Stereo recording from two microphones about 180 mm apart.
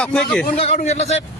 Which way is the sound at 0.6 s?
35° left (ahead or behind).